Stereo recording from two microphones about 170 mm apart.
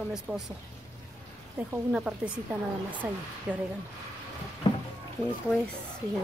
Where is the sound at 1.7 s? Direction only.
5° right (ahead or behind).